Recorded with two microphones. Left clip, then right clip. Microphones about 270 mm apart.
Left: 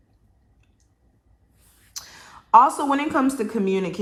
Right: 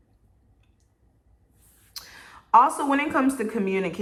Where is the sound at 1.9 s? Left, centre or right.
Centre.